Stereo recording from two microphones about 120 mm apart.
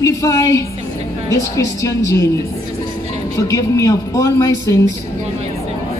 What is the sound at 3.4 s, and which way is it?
Speech, 25° left (ahead or behind).